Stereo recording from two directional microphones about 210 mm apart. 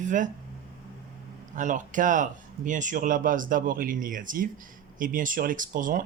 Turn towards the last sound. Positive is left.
turn(degrees=-40)  # may be behind; listen again after turning